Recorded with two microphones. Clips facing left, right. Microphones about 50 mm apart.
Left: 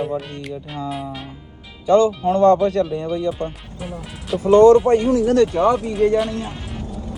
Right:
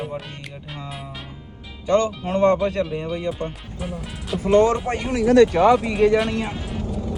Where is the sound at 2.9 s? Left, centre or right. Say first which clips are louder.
Left 4 dB; centre.